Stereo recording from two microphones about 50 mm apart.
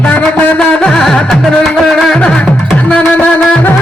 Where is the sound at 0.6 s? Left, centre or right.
Centre.